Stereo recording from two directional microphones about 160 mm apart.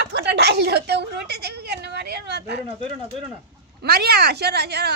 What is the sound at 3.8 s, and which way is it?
A woman's voice, 90° right.